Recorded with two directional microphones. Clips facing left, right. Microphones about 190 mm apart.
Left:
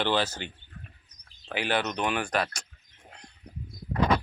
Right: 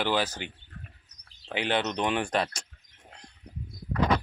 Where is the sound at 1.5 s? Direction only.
20° right (ahead or behind).